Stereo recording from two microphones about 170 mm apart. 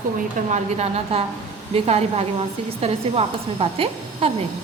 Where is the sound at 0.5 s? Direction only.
40° right (ahead or behind).